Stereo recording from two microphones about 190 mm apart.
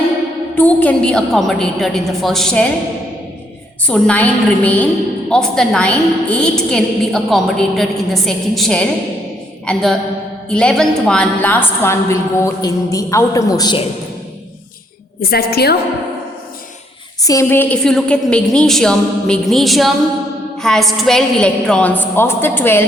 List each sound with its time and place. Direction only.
0.5 s a woman's voice: 10° left (ahead or behind)
3.8 s a woman's voice: 5° left (ahead or behind); by 13.8 s 20° left (ahead or behind)
15.2 s a woman's voice: 55° left (ahead or behind)
17.2 s a woman's voice: 15° left (ahead or behind)